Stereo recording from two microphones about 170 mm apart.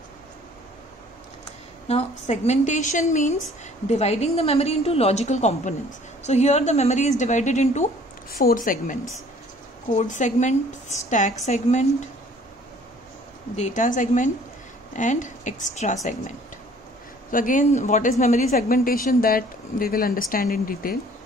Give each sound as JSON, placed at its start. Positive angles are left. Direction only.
{"t": 1.9, "sound": "a woman's voice", "side_deg": 40}
{"t": 8.3, "sound": "a woman's voice", "side_deg": 60}
{"t": 9.9, "sound": "a woman's voice", "side_deg": 45}
{"t": 13.6, "sound": "a woman's voice", "side_deg": 50}